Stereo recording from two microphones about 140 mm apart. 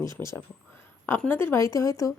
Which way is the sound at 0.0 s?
20° left (ahead or behind).